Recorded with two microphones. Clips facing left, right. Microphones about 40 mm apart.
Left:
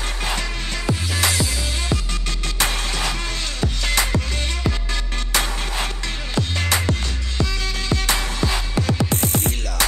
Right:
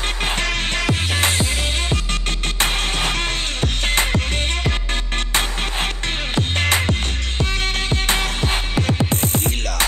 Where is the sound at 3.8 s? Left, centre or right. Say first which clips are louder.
Right 2 dB; right.